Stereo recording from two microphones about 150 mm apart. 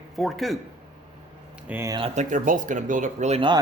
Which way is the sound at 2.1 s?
55° right (ahead or behind).